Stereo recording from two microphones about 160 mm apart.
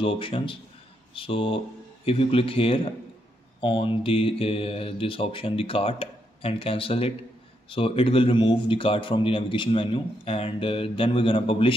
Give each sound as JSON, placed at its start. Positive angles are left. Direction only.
{"t": 0.0, "sound": "a man's voice", "side_deg": 35}